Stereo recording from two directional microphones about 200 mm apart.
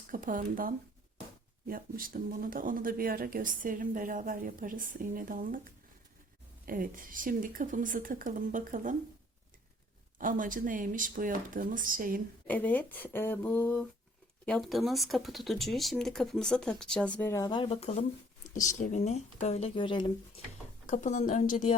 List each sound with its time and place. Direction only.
0.1 s speech: 40° right (ahead or behind)
6.7 s speech: 45° right (ahead or behind)
10.2 s speech: 40° right (ahead or behind)
12.5 s speech: 10° left (ahead or behind)
17.2 s speech: 15° left (ahead or behind)
20.8 s speech: 35° left (ahead or behind)